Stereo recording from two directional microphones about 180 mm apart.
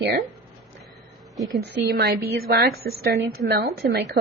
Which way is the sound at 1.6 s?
65° right (ahead or behind).